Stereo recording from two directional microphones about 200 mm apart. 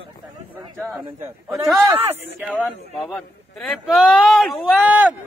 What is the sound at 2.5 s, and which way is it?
A man's voice, 5° left (ahead or behind).